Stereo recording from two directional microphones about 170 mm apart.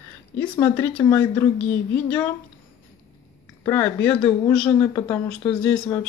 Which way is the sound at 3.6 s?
10° left (ahead or behind).